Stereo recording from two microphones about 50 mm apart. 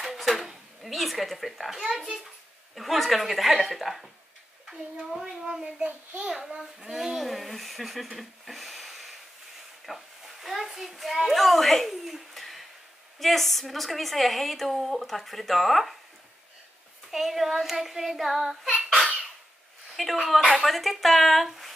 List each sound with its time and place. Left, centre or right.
0.0 s a child's voice: centre
2.7 s a woman's voice: centre; by 6.2 s right
6.2 s a child's voice: centre
17.1 s a woman's voice: centre
20.0 s a woman's voice: centre